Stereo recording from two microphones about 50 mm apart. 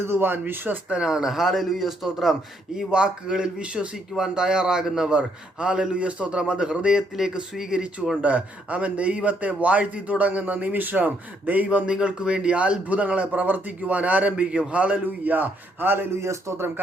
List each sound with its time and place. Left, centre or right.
0.0 s speech: right
0.9 s a man's voice: centre
2.7 s a man's voice: centre
8.2 s a man's voice: right
11.9 s a man's voice: centre; by 16.0 s right
16.2 s speech: right